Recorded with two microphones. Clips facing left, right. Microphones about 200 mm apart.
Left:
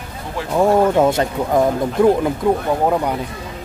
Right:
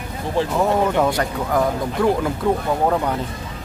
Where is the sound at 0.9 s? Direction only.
25° left (ahead or behind).